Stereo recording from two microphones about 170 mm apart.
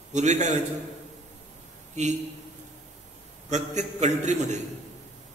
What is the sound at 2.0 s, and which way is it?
Speech, 45° right (ahead or behind).